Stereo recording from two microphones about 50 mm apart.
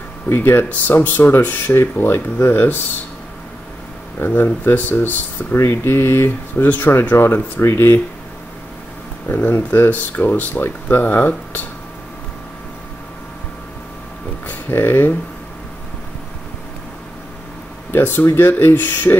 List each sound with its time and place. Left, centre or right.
0.3 s speech: left
4.2 s speech: left
5.6 s speech: left
7.2 s speech: left
9.3 s speech: left
14.7 s speech: left
17.9 s speech: left